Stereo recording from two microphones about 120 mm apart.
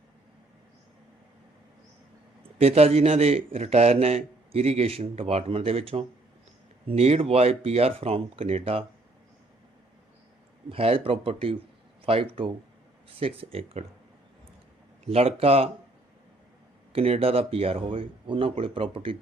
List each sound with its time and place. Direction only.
2.6 s a man's voice: 60° right (ahead or behind)
10.7 s speech: 55° right (ahead or behind)
15.0 s a man's voice: 55° right (ahead or behind)
16.9 s speech: 55° right (ahead or behind)